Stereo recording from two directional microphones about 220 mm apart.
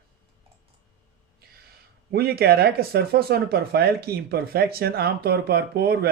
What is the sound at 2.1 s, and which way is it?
Speech, 45° right (ahead or behind).